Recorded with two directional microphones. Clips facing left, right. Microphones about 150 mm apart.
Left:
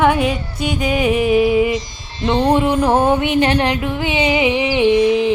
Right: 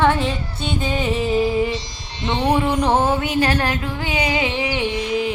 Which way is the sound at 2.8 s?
15° left (ahead or behind).